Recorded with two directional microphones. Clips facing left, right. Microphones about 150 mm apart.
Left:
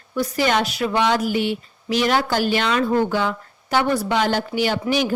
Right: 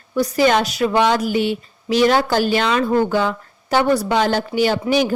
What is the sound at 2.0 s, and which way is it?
Speech, 40° right (ahead or behind).